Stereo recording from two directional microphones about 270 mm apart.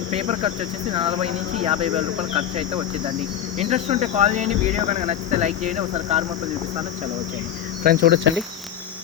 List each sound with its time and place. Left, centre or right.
0.1 s speech: right
8.0 s speech: right